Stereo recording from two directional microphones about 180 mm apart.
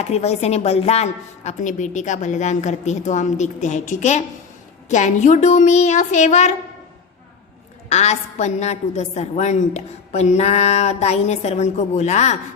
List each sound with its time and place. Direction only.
0.0 s a woman's voice: 35° left (ahead or behind)
7.9 s a woman's voice: 40° left (ahead or behind)